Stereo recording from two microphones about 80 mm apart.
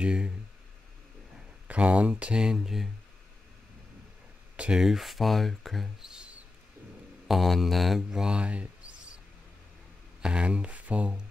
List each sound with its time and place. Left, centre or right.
0.0 s speech: centre
1.7 s speech: centre
4.6 s speech: centre
7.2 s speech: centre
10.2 s speech: centre